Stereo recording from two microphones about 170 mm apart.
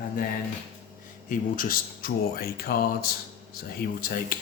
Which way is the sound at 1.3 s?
50° left (ahead or behind).